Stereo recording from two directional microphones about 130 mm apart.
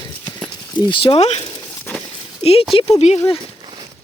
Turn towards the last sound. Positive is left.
turn(degrees=55)  # may be behind; listen again after turning